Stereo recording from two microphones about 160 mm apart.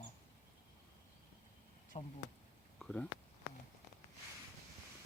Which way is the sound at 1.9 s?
45° left (ahead or behind).